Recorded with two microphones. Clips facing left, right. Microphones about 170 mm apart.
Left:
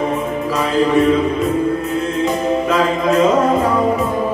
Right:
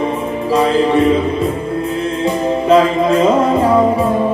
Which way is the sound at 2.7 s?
30° right (ahead or behind).